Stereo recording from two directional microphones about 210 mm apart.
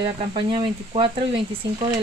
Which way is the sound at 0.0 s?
20° right (ahead or behind).